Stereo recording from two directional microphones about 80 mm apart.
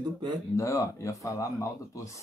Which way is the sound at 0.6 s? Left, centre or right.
Left.